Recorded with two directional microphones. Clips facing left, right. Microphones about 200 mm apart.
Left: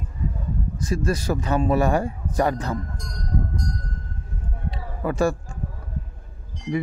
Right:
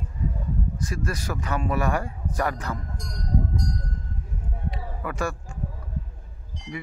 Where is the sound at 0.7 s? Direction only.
25° left (ahead or behind).